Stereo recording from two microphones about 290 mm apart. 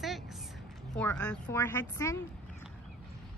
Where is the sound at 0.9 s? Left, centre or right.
Centre.